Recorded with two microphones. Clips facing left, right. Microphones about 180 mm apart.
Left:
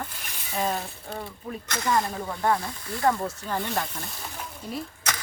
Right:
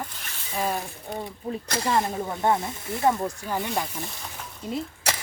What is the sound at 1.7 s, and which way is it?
Speech, 30° right (ahead or behind).